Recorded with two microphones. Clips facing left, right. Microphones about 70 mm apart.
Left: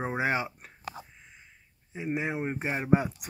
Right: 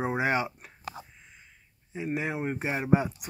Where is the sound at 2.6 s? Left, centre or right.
Centre.